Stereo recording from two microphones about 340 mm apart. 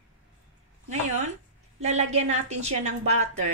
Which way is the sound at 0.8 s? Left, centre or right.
Centre.